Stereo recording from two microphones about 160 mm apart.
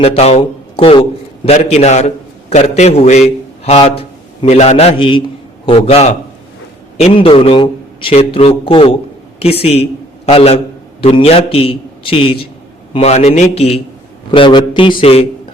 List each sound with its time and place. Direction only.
0.0 s a man's voice: 40° left (ahead or behind)
1.7 s a man's voice: 45° left (ahead or behind)
14.3 s a man's voice: 30° left (ahead or behind)